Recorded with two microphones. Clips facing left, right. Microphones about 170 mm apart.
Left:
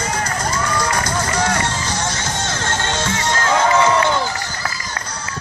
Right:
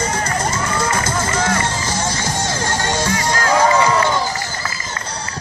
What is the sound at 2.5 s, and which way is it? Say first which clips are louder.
Music: right 1 dB; 10° right (ahead or behind).